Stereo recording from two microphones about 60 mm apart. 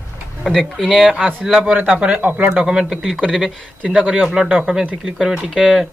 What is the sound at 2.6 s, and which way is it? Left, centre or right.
Speech, centre.